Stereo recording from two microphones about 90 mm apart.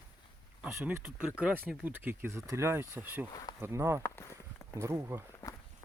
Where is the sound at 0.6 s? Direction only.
20° right (ahead or behind).